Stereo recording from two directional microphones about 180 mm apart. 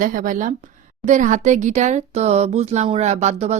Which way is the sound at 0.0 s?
50° right (ahead or behind).